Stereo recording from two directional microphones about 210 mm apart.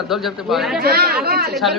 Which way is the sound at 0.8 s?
50° right (ahead or behind).